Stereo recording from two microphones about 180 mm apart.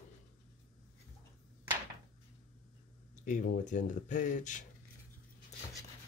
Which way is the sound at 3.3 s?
45° left (ahead or behind).